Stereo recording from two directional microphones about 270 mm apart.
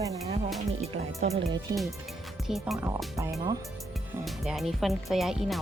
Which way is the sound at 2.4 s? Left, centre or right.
Centre.